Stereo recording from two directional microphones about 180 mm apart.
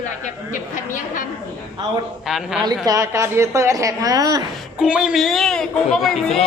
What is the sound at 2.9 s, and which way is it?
A woman's voice, 15° right (ahead or behind).